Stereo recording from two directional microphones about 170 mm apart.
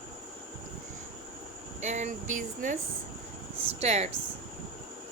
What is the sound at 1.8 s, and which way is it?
A woman's voice, 45° right (ahead or behind).